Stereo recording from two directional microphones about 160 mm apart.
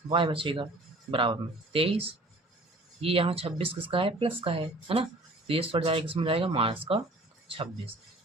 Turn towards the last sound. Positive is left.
turn(degrees=-35)  # may be behind; listen again after turning